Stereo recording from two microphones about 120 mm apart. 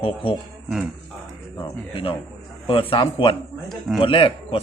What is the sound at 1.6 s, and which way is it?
A man's voice, 45° left (ahead or behind).